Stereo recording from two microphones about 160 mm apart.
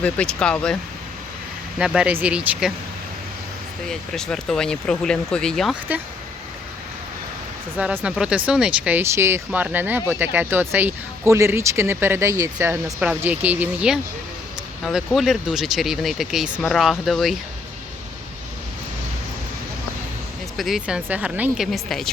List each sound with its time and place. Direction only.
0.0 s speech: 5° left (ahead or behind)
1.8 s speech: 5° right (ahead or behind)
3.8 s speech: 5° left (ahead or behind)
7.8 s speech: 5° right (ahead or behind)
20.6 s speech: centre (ahead or behind)